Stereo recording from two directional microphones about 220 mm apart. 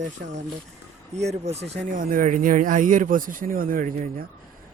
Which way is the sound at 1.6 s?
50° right (ahead or behind).